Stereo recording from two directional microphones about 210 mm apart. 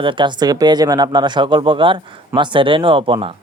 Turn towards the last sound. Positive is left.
turn(degrees=-25)  # may be behind; listen again after turning